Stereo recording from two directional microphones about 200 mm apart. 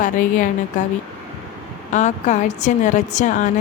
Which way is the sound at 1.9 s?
35° left (ahead or behind).